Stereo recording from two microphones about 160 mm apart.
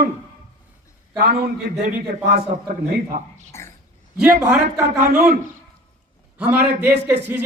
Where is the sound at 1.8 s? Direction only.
60° right (ahead or behind).